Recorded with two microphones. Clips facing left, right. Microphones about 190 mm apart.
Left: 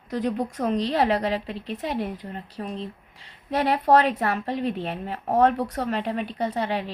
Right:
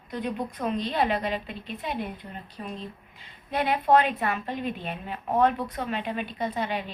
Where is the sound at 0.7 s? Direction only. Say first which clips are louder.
Left 4 dB; 85° left.